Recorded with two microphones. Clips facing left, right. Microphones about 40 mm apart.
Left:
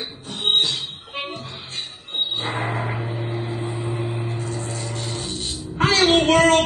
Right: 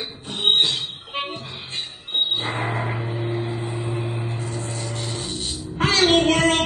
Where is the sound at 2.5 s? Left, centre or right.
Centre.